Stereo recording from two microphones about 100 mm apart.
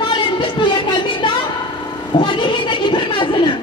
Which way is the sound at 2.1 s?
50° left (ahead or behind).